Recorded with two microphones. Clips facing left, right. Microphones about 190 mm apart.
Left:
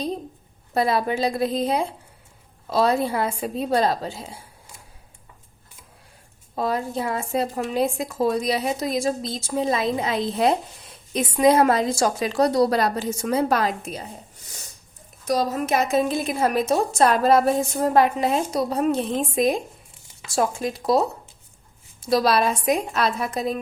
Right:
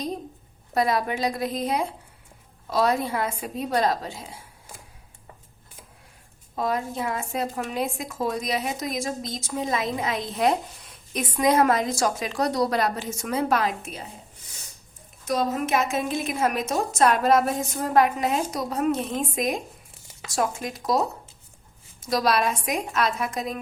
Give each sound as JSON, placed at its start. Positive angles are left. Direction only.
{"t": 0.7, "sound": "a woman's voice", "side_deg": 30}
{"t": 6.6, "sound": "speech", "side_deg": 30}
{"t": 15.3, "sound": "a woman's voice", "side_deg": 35}
{"t": 22.0, "sound": "speech", "side_deg": 30}